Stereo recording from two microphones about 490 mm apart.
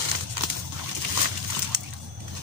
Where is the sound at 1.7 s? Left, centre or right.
Right.